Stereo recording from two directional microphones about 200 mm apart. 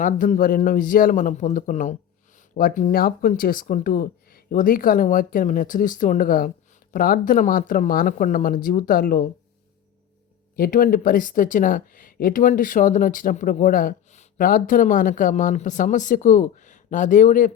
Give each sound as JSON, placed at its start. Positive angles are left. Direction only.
{"t": 0.0, "sound": "speech", "side_deg": 40}
{"t": 10.5, "sound": "speech", "side_deg": 45}